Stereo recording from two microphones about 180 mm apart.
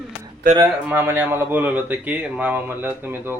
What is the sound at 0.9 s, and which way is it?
Speech, 10° right (ahead or behind).